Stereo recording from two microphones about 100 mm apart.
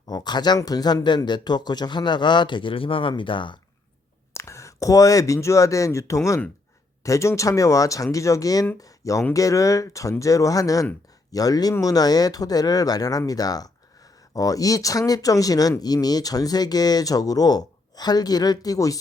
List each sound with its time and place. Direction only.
0.1 s speech: 45° left (ahead or behind)
4.4 s speech: 30° left (ahead or behind)